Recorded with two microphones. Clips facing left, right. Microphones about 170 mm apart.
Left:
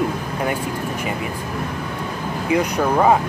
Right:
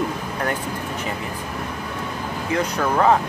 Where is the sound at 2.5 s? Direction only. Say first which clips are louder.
Left 3 dB; 15° left (ahead or behind).